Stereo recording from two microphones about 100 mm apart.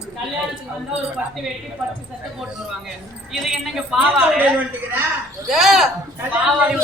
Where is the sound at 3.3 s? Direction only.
5° right (ahead or behind).